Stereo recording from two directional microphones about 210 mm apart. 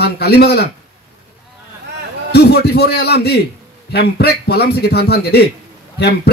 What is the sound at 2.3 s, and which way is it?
A man's voice, 50° left (ahead or behind).